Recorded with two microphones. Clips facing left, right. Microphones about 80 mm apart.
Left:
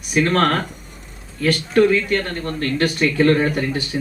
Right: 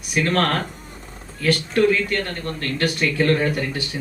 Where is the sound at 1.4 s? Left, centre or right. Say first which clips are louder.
Left 2 dB; left.